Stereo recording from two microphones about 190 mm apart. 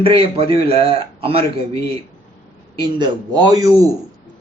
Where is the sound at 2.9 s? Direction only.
25° right (ahead or behind).